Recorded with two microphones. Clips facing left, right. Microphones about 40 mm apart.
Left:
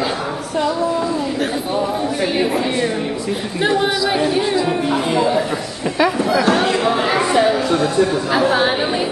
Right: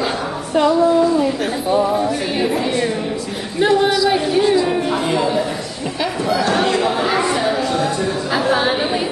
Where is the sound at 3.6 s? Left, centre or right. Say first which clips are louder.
Right 3 dB; centre.